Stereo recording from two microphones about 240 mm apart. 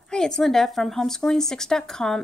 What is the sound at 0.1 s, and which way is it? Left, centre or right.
A woman's voice, centre.